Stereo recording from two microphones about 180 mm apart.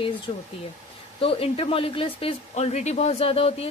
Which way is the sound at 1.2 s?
30° left (ahead or behind).